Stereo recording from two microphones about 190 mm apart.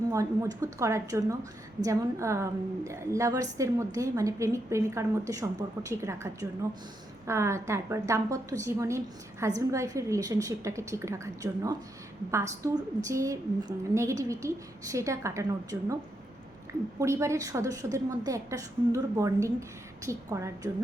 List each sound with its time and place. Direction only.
0.1 s a woman's voice: 15° right (ahead or behind)
17.0 s a woman's voice: 15° right (ahead or behind)